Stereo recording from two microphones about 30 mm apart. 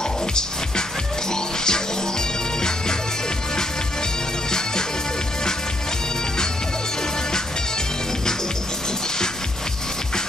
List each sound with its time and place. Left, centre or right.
0.0 s music: left
4.5 s music: left